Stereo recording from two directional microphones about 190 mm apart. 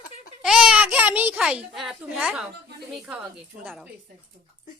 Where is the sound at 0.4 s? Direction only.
5° right (ahead or behind).